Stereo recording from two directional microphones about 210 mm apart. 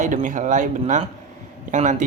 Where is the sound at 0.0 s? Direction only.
40° right (ahead or behind).